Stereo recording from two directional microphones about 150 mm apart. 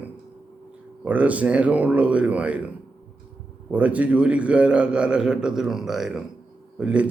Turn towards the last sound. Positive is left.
turn(degrees=-10)  # may be behind; listen again after turning